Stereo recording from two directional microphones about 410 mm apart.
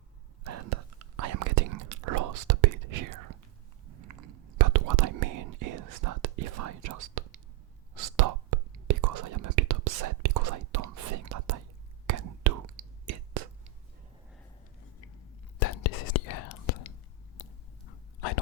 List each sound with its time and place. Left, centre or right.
0.4 s whispering: right
15.5 s whispering: left
17.4 s a sound: left
18.2 s whispering: left